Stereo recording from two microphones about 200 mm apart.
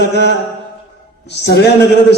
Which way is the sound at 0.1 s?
60° left (ahead or behind).